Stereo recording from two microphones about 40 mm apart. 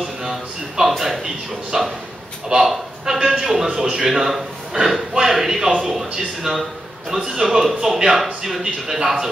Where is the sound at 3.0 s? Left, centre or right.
Centre.